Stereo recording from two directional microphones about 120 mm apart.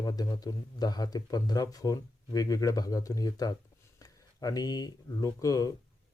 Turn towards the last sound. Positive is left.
turn(degrees=30)  # may be behind; listen again after turning